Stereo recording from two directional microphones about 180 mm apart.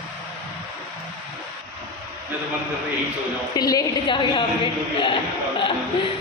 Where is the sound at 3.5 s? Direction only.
20° left (ahead or behind).